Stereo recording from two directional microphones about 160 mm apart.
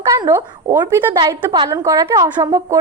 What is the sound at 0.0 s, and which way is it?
A woman's voice, 20° right (ahead or behind).